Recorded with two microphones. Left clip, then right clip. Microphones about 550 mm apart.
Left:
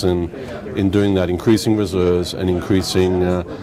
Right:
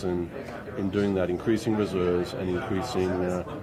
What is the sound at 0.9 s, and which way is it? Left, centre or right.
Speech, left.